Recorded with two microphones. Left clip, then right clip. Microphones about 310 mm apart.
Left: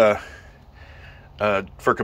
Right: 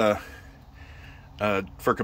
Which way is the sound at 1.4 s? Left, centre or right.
Centre.